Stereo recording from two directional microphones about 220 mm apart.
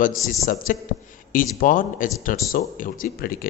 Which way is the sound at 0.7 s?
40° left (ahead or behind).